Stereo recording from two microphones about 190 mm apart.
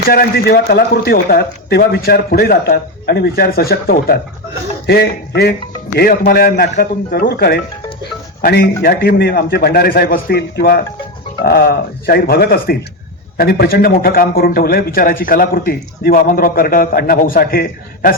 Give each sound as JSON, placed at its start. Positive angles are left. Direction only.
{"t": 0.1, "sound": "a man's voice", "side_deg": 55}